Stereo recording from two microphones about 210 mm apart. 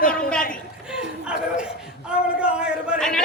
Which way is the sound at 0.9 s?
5° right (ahead or behind).